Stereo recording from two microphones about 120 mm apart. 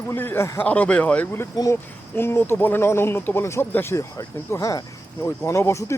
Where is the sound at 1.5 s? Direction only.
30° left (ahead or behind).